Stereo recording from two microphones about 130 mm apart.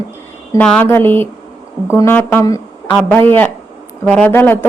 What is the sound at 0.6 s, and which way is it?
Speech, 5° left (ahead or behind).